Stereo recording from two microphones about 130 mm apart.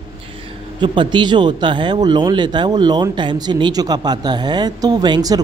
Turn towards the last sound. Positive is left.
turn(degrees=-30)  # may be behind; listen again after turning